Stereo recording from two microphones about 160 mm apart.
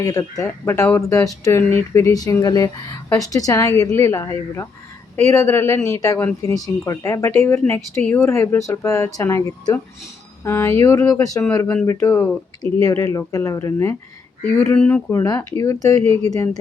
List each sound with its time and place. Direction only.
0.0 s speech: 20° left (ahead or behind)
11.9 s speech: 15° left (ahead or behind)